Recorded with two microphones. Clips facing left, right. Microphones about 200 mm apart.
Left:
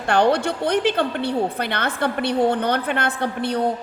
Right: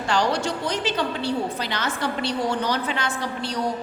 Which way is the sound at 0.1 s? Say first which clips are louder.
Left 5 dB; 60° left (ahead or behind).